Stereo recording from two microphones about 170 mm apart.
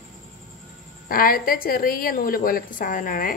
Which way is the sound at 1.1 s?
60° left (ahead or behind).